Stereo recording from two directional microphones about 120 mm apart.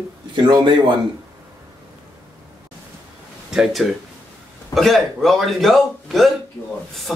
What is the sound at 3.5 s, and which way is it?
Speech, 5° right (ahead or behind).